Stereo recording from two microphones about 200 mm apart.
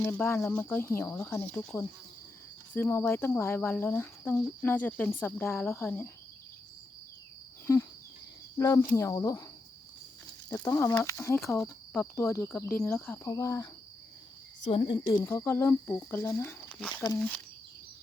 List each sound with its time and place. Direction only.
0.0 s speech: 10° left (ahead or behind)
7.7 s speech: 15° left (ahead or behind)
10.5 s speech: 15° left (ahead or behind)
16.9 s speech: 20° left (ahead or behind)
17.2 s speech: 5° left (ahead or behind)